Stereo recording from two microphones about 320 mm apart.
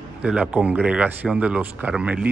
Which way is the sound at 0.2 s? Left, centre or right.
Centre.